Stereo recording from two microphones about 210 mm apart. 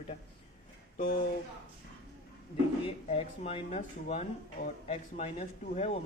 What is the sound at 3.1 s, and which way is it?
Speech, 30° left (ahead or behind).